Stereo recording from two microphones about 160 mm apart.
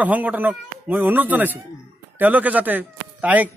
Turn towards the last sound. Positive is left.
turn(degrees=-10)  # may be behind; listen again after turning